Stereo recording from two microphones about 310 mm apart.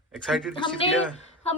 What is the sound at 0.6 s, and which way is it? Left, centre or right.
Speech, centre.